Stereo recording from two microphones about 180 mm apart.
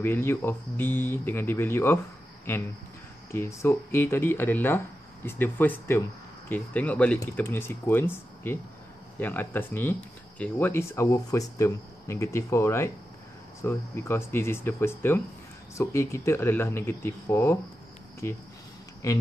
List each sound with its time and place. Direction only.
0.0 s speech: 15° left (ahead or behind)